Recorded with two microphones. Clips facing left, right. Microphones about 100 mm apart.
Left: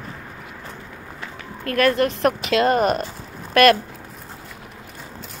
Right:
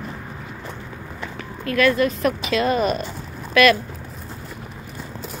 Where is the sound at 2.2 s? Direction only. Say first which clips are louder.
Left 2 dB; 70° left (ahead or behind).